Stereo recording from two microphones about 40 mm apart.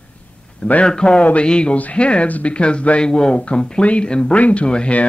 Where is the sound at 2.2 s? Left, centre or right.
Left.